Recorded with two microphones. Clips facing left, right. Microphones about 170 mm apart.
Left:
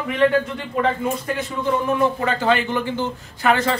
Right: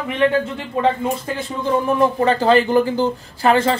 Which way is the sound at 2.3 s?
35° right (ahead or behind).